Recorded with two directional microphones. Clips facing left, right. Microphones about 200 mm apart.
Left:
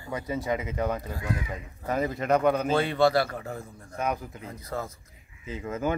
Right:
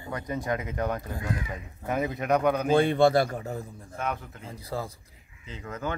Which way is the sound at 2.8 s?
50° right (ahead or behind).